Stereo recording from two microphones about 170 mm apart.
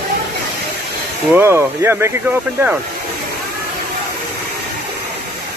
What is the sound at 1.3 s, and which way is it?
Speech, 15° right (ahead or behind).